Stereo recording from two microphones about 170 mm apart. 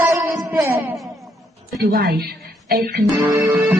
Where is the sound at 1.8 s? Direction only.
65° right (ahead or behind).